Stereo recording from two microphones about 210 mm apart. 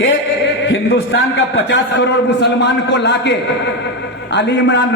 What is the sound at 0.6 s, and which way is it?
A man's voice, 60° left (ahead or behind).